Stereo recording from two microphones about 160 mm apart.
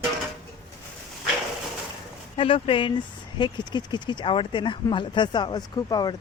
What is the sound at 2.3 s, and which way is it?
Speech, 35° left (ahead or behind).